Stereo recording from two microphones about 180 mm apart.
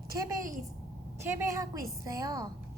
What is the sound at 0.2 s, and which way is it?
A woman's voice, 20° right (ahead or behind).